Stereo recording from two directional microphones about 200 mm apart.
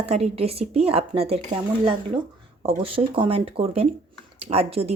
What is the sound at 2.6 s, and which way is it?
Speech, 30° right (ahead or behind).